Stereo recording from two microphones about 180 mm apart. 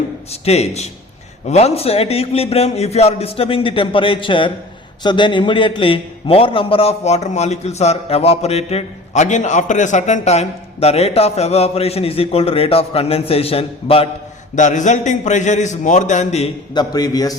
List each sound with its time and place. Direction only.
0.3 s a man's voice: 35° left (ahead or behind)
14.5 s a man's voice: 45° left (ahead or behind)
16.7 s a man's voice: 20° left (ahead or behind)